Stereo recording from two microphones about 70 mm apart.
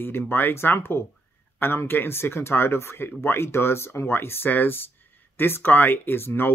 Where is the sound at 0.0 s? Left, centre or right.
Left.